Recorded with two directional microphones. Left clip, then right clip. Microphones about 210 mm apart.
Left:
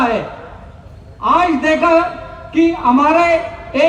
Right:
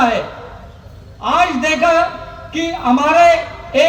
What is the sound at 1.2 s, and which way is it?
A man's voice, 45° right (ahead or behind).